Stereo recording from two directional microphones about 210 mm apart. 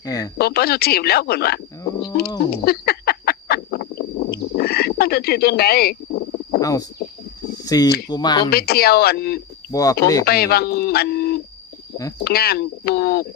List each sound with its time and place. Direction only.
0.0 s speech: 15° left (ahead or behind)
0.3 s speech: 50° left (ahead or behind)
2.5 s a sound: 50° left (ahead or behind)
6.6 s speech: 15° left (ahead or behind)
7.5 s a sound: 20° left (ahead or behind)
8.1 s speech: 20° left (ahead or behind)
8.4 s speech: 45° left (ahead or behind)
9.7 s speech: 15° left (ahead or behind)
10.2 s speech: 45° left (ahead or behind)